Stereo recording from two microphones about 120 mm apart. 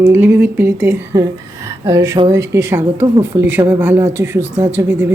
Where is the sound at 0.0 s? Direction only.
20° right (ahead or behind).